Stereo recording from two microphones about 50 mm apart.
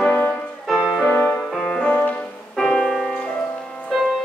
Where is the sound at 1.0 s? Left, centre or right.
Left.